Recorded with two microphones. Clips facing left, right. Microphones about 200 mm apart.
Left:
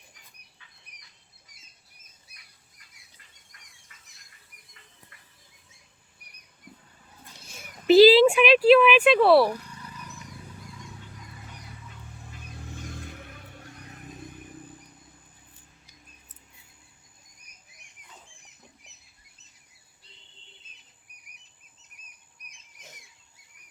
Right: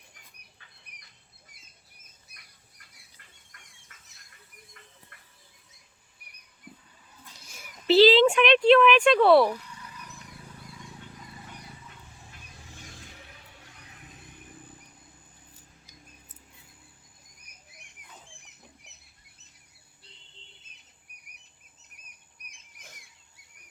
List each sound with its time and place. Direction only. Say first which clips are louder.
0.9 s bird: right 1 dB; 60° right (ahead or behind)
3.5 s bird: right 2 dB; 50° right (ahead or behind)
7.9 s speech: left 3 dB; 10° left (ahead or behind)
13.0 s music: left 8 dB; 55° left (ahead or behind)